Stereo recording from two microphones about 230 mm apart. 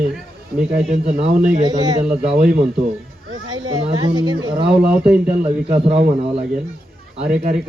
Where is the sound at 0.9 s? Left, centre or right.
Right.